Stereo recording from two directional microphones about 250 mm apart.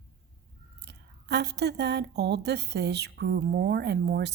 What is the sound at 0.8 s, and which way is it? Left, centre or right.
A woman's voice, right.